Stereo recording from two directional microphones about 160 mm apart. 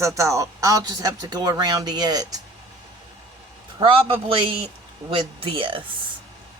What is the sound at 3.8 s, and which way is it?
A man's voice, 35° right (ahead or behind).